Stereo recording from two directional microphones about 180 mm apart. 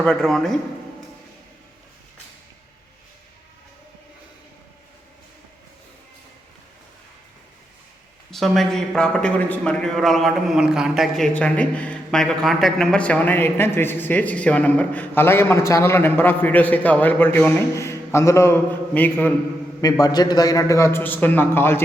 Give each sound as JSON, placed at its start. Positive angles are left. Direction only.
{"t": 0.0, "sound": "a man's voice", "side_deg": 5}
{"t": 8.3, "sound": "a man's voice", "side_deg": 0}
{"t": 19.8, "sound": "a man's voice", "side_deg": 20}